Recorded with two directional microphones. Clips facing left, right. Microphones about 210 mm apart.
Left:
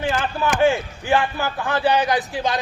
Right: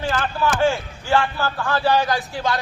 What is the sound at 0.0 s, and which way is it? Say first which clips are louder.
A man's voice: even; 20° left (ahead or behind).